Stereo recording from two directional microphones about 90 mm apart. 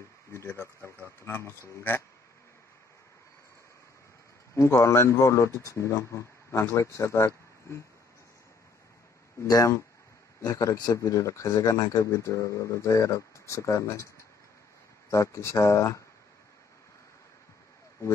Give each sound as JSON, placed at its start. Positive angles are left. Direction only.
{"t": 0.3, "sound": "speech", "side_deg": 30}
{"t": 4.6, "sound": "speech", "side_deg": 30}
{"t": 9.4, "sound": "speech", "side_deg": 40}
{"t": 15.0, "sound": "speech", "side_deg": 35}